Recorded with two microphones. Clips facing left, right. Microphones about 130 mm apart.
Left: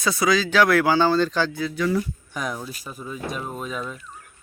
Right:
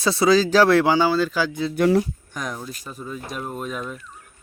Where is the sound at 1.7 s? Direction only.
65° right (ahead or behind).